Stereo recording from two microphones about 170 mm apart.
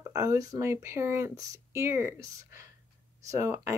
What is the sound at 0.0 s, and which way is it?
Speech, 20° right (ahead or behind).